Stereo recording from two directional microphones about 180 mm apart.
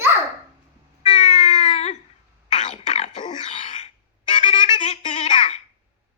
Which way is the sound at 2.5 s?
40° left (ahead or behind).